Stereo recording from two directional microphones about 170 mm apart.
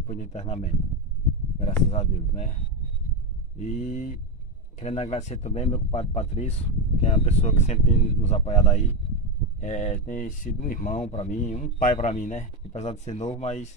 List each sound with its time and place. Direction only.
0.0 s a man's voice: 45° left (ahead or behind)
1.9 s a man's voice: 45° left (ahead or behind)
3.5 s a man's voice: 45° left (ahead or behind)